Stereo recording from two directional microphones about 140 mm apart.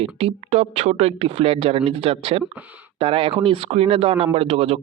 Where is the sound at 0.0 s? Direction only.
45° right (ahead or behind).